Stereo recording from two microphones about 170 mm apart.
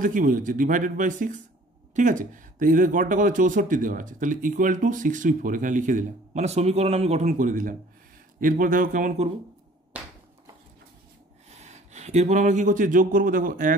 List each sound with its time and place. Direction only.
0.0 s speech: 50° right (ahead or behind)
11.6 s speech: 40° right (ahead or behind)